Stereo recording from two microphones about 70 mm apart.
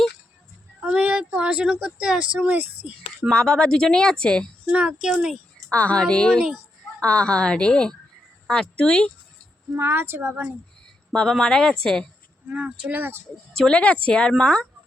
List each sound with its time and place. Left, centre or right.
0.9 s speech: centre
3.2 s speech: centre
4.7 s speech: centre
5.7 s speech: centre
9.7 s speech: right
11.1 s speech: centre
12.5 s speech: centre
13.0 s speech: right
13.6 s speech: centre